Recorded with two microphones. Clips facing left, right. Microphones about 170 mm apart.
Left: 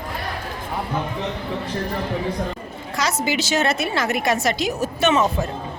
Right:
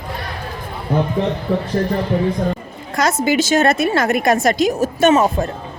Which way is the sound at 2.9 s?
50° right (ahead or behind).